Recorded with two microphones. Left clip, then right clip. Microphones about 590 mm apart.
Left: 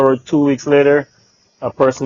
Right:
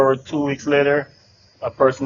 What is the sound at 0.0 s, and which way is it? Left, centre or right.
Speech, left.